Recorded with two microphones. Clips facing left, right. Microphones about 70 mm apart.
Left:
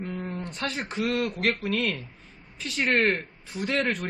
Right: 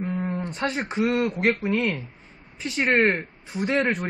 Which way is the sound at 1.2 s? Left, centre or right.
Centre.